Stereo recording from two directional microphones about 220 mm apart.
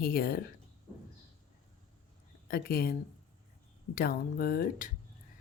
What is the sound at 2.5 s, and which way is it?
Speech, 45° left (ahead or behind).